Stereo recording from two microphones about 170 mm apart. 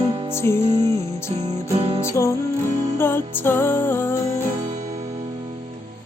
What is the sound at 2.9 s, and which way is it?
Music, 15° left (ahead or behind).